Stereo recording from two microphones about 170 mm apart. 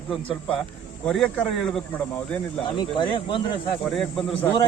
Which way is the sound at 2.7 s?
30° left (ahead or behind).